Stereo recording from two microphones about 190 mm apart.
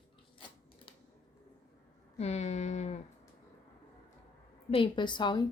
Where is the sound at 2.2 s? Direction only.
35° left (ahead or behind).